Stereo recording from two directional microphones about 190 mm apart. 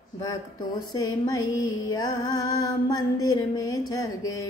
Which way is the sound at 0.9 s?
20° left (ahead or behind).